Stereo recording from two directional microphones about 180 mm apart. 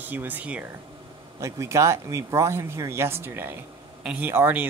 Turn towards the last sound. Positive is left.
turn(degrees=-10)  # may be behind; listen again after turning